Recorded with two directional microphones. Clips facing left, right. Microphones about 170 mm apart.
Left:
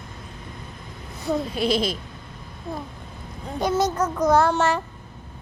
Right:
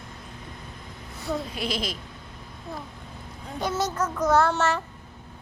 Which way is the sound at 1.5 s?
30° left (ahead or behind).